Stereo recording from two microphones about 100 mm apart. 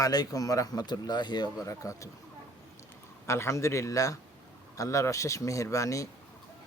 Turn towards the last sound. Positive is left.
turn(degrees=35)  # may be behind; listen again after turning